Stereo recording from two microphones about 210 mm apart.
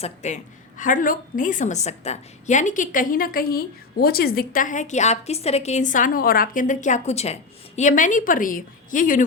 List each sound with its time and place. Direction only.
0.0 s a woman's voice: 35° left (ahead or behind)